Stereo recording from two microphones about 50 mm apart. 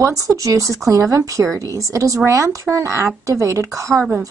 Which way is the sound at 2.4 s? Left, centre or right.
Right.